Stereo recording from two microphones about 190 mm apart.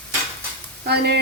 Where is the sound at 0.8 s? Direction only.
60° right (ahead or behind).